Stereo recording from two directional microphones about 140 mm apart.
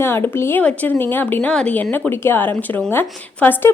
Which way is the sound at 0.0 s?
15° left (ahead or behind).